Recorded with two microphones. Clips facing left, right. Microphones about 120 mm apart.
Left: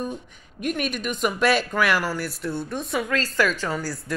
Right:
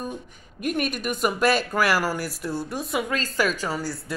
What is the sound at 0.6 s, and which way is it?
Speech, centre (ahead or behind).